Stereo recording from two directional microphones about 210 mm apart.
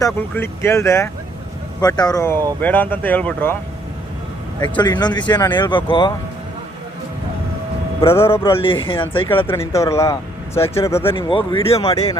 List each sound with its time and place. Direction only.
0.0 s speech: 10° left (ahead or behind)
4.8 s speech: 20° left (ahead or behind)
8.1 s speech: 10° left (ahead or behind)
8.4 s speech: 25° left (ahead or behind)
9.5 s speech: 15° left (ahead or behind)
11.1 s speech: 25° left (ahead or behind)